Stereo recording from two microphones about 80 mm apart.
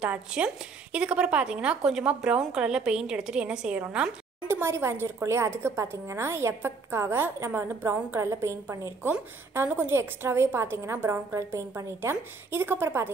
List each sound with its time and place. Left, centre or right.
0.0 s a woman's voice: centre
4.5 s a woman's voice: right